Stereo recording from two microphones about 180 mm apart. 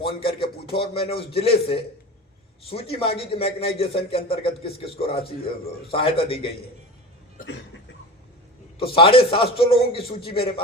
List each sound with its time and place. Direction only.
0.2 s a man's voice: 30° left (ahead or behind)
7.4 s cough: 75° left (ahead or behind)
8.8 s a man's voice: 30° left (ahead or behind)